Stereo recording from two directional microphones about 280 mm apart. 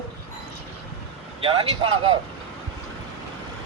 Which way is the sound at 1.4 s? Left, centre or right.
Centre.